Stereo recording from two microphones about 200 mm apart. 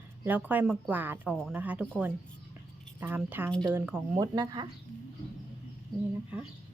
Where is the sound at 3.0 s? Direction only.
10° right (ahead or behind).